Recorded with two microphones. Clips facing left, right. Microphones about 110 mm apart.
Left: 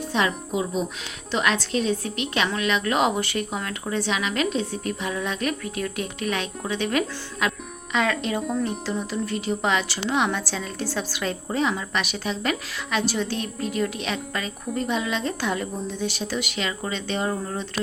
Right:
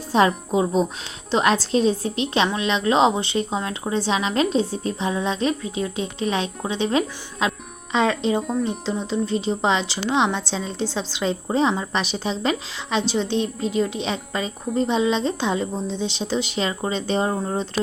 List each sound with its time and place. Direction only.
0.1 s a woman's voice: 35° right (ahead or behind)
8.4 s speech: 5° right (ahead or behind)
8.9 s a woman's voice: 25° right (ahead or behind)